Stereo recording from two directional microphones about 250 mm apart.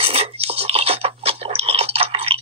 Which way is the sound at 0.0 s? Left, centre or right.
Right.